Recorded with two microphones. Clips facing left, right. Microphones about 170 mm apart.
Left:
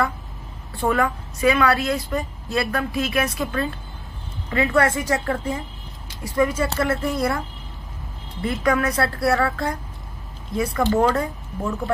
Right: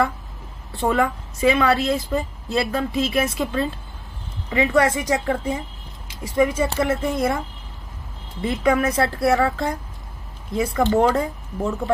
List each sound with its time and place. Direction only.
0.7 s a woman's voice: 20° right (ahead or behind)
8.4 s a woman's voice: 20° right (ahead or behind)